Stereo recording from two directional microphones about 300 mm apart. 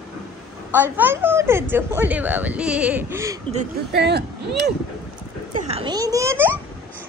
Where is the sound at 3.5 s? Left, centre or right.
Right.